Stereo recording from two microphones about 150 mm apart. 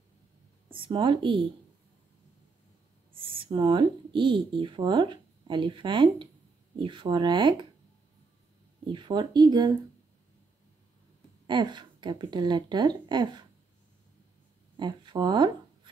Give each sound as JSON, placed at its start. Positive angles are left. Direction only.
{"t": 0.7, "sound": "speech", "side_deg": -35}
{"t": 3.1, "sound": "speech", "side_deg": -35}
{"t": 8.8, "sound": "speech", "side_deg": -30}
{"t": 11.4, "sound": "speech", "side_deg": -30}
{"t": 14.8, "sound": "speech", "side_deg": -30}